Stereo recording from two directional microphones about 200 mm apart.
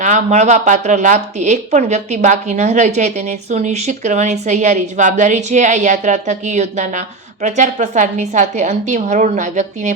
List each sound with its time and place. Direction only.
0.0 s speech: 35° right (ahead or behind)